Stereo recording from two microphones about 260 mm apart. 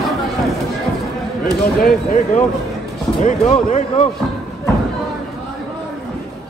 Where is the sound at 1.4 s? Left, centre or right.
Left.